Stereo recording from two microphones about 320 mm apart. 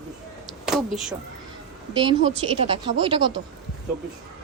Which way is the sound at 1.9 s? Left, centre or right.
Centre.